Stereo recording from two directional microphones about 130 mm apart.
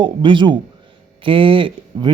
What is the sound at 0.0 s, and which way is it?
A man's voice, 40° right (ahead or behind).